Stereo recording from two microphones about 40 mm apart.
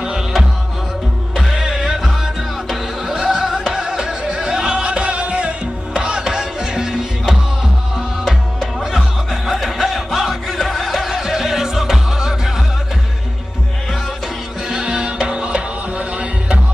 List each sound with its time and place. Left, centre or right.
1.3 s music: centre
8.7 s music: centre
14.7 s music: centre